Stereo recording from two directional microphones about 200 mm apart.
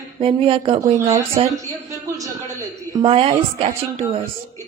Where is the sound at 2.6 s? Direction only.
15° right (ahead or behind).